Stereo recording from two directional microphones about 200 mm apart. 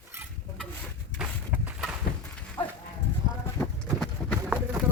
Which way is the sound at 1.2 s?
5° right (ahead or behind).